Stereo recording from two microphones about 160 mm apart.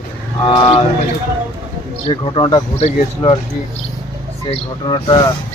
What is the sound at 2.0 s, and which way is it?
Speech, 35° left (ahead or behind).